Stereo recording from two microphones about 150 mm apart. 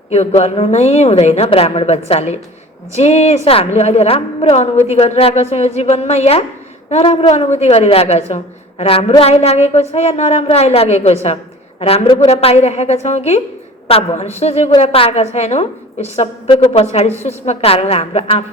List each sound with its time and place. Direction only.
0.1 s a woman's voice: 45° left (ahead or behind)